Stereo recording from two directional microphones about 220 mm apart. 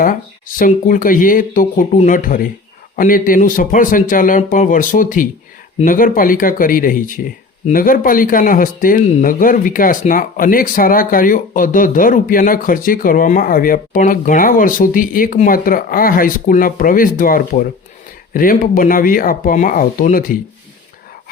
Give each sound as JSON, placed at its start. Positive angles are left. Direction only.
{"t": 0.0, "sound": "a man's voice", "side_deg": 40}